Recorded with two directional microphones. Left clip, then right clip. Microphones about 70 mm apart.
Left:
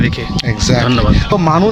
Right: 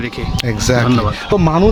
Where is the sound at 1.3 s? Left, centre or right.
Right.